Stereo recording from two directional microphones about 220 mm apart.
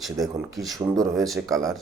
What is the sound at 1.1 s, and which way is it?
Speech, centre (ahead or behind).